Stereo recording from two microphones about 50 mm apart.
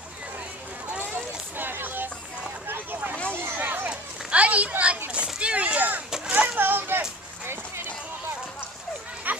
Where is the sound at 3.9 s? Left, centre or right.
Right.